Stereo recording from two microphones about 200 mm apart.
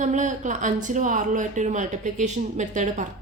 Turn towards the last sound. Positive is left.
turn(degrees=-40)  # may be behind; listen again after turning